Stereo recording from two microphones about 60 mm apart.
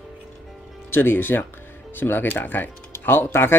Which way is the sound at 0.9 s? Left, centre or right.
Left.